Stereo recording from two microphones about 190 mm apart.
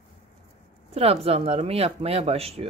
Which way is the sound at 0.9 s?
30° right (ahead or behind).